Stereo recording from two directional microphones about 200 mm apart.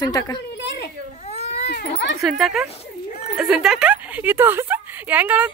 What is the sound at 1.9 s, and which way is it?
Speech, 60° left (ahead or behind).